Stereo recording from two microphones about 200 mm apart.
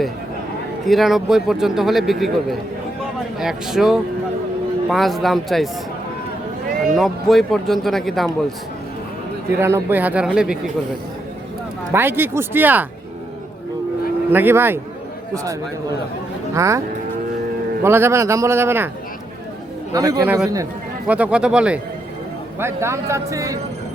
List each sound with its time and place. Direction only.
0.9 s a man's voice: centre (ahead or behind)
6.9 s a man's voice: centre (ahead or behind)
9.6 s speech: 10° right (ahead or behind)
11.9 s speech: 10° right (ahead or behind)
14.3 s speech: 10° right (ahead or behind)
16.6 s speech: 15° right (ahead or behind)
17.8 s speech: 10° right (ahead or behind)
19.9 s a man's voice: 20° right (ahead or behind)